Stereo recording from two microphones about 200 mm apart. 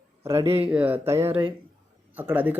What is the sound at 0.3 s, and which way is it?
Speech, 15° right (ahead or behind).